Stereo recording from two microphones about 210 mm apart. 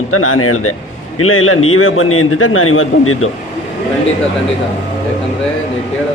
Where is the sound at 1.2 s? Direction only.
75° left (ahead or behind).